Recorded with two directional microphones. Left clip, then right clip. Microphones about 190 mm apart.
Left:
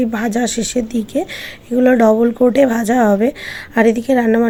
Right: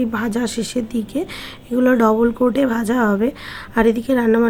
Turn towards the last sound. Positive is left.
turn(degrees=15)  # may be behind; listen again after turning